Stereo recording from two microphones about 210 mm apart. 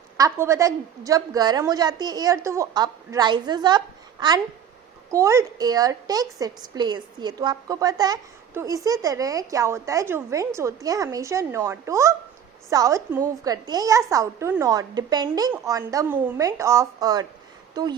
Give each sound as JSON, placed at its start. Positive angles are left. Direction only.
{"t": 0.2, "sound": "a woman's voice", "side_deg": -15}